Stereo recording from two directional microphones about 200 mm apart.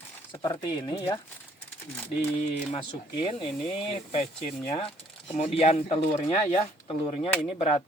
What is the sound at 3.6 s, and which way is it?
Speech, centre (ahead or behind).